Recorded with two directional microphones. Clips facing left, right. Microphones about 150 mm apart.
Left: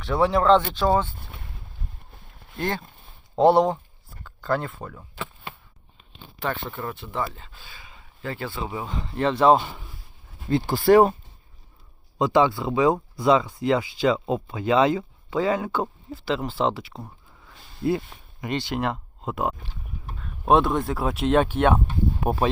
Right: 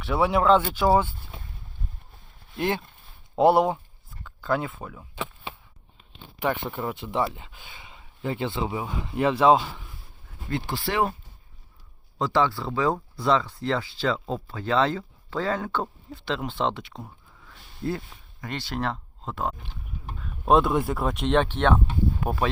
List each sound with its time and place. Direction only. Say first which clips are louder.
0.0 s speech: left 1 dB; 5° right (ahead or behind)
2.6 s speech: right 1 dB; 5° right (ahead or behind)
5.1 s chop: right 1 dB; 20° right (ahead or behind)
6.4 s speech: right 2 dB; 15° right (ahead or behind)
10.5 s speech: left 11 dB; 45° left (ahead or behind)
12.2 s speech: left 4 dB; 15° left (ahead or behind)
18.3 s speech: left 4 dB; 15° left (ahead or behind)
20.2 s speech: left 1 dB; centre (ahead or behind)
22.2 s speech: left 3 dB; 20° left (ahead or behind)